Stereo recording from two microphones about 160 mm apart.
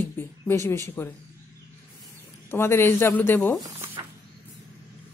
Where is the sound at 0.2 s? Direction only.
15° left (ahead or behind).